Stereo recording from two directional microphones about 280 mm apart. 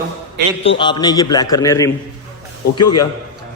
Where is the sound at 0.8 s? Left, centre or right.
Centre.